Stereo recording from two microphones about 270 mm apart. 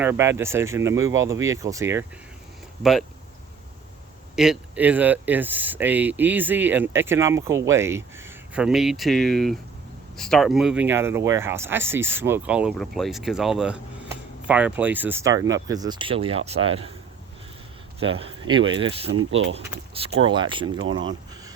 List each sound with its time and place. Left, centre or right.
0.0 s speech: centre
4.4 s speech: centre; by 16.9 s right
18.0 s speech: centre
20.1 s speech: centre